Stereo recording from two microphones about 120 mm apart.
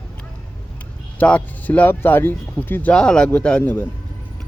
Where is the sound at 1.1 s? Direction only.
15° left (ahead or behind).